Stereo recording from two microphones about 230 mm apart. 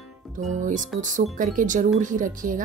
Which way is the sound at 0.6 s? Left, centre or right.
Right.